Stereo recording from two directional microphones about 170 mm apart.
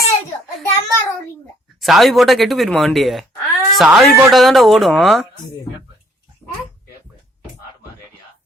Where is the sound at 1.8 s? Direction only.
Centre (ahead or behind).